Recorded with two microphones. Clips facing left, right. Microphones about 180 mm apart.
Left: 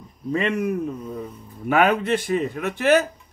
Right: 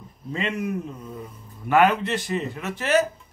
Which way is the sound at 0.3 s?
60° left (ahead or behind).